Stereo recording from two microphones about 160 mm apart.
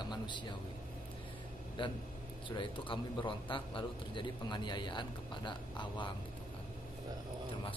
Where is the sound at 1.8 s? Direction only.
30° left (ahead or behind).